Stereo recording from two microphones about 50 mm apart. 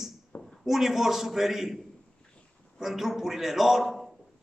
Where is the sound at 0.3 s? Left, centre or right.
Left.